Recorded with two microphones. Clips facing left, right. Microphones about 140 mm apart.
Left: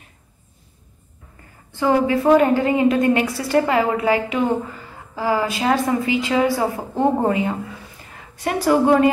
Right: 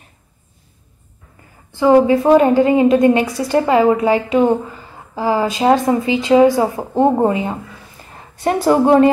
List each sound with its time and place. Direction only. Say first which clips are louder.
1.8 s a woman's voice: right 6 dB; 20° right (ahead or behind)
8.5 s a woman's voice: right 4 dB; 25° right (ahead or behind)